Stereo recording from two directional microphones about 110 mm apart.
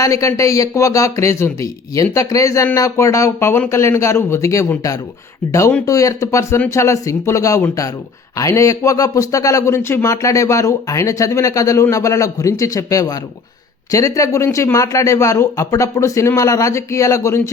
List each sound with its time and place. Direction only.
0.0 s speech: 30° left (ahead or behind)